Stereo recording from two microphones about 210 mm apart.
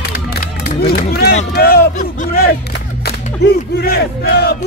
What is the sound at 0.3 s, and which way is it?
Crowd, 45° left (ahead or behind).